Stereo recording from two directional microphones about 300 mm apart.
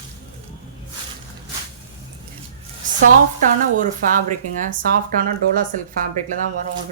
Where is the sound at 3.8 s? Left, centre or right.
Right.